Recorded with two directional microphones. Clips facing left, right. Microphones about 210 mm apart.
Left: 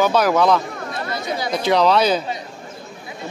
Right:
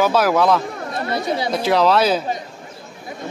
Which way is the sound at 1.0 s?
30° right (ahead or behind).